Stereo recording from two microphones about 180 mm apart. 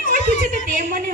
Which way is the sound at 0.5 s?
45° right (ahead or behind).